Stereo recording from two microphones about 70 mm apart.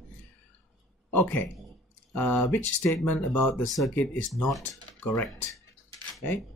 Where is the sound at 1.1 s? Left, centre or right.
Left.